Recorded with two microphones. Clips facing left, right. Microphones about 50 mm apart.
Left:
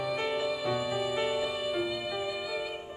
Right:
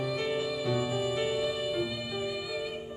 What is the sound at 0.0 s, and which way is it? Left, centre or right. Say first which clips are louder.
Music: even; centre.